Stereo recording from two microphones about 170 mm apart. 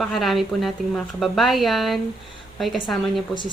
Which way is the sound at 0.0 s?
Centre (ahead or behind).